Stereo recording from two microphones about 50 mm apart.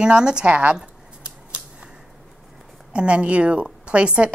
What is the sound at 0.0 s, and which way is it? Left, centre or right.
Speech, centre.